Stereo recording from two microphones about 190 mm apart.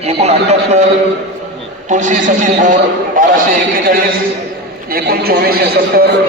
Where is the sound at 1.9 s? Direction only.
40° right (ahead or behind).